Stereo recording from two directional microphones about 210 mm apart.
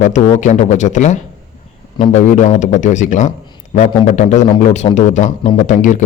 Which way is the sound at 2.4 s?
35° left (ahead or behind).